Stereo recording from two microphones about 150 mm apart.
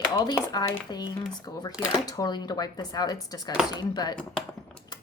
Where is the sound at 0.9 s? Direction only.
30° left (ahead or behind).